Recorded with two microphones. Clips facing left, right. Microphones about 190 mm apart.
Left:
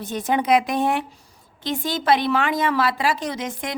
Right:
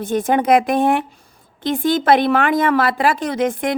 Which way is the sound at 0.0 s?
50° right (ahead or behind).